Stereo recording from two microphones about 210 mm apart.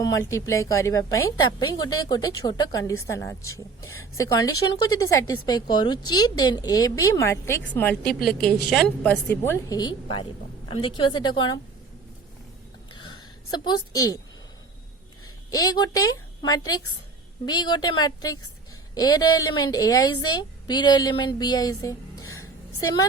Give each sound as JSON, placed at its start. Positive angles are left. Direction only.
{"t": 0.0, "sound": "a woman's voice", "side_deg": 15}
{"t": 12.9, "sound": "a sound", "side_deg": 20}
{"t": 15.4, "sound": "a woman's voice", "side_deg": 15}